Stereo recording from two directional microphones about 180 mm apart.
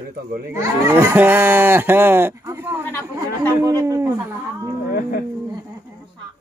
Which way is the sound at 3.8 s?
15° right (ahead or behind).